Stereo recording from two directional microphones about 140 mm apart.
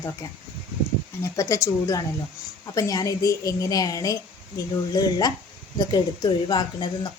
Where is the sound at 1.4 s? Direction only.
20° left (ahead or behind).